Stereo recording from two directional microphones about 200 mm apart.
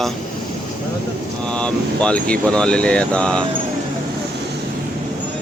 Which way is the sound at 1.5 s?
5° left (ahead or behind).